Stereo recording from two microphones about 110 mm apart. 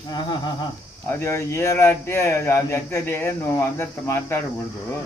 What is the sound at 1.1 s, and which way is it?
Speech, 25° left (ahead or behind).